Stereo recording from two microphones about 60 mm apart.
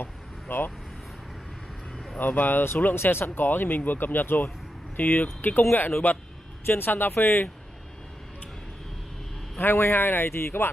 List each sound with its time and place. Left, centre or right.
0.0 s vehicle: left
2.1 s speech: left
9.6 s speech: left